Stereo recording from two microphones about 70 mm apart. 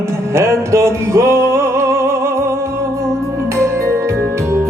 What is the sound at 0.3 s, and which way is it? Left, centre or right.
Music, right.